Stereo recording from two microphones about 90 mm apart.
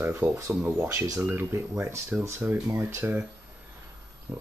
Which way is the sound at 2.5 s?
20° right (ahead or behind).